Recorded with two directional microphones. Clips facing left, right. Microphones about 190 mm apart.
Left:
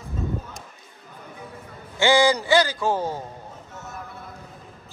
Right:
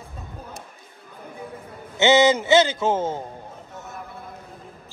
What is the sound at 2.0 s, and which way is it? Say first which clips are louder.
A man's voice: right 2 dB; 20° right (ahead or behind).